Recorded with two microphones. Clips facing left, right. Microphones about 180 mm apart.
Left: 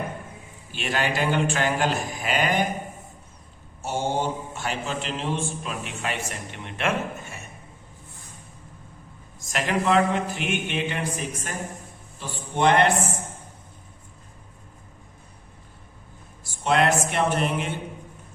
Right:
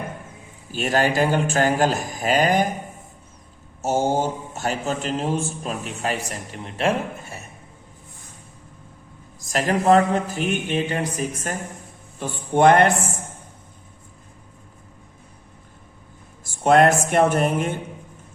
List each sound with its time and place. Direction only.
0.7 s speech: 40° right (ahead or behind)
3.8 s speech: 40° right (ahead or behind)
9.4 s a man's voice: 40° right (ahead or behind)
16.4 s speech: 50° right (ahead or behind)